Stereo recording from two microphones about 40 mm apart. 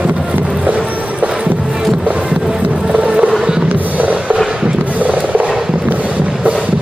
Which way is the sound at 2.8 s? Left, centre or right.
Right.